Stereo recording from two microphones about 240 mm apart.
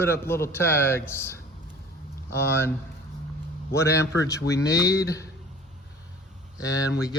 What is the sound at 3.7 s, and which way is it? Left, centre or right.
A man's voice, centre.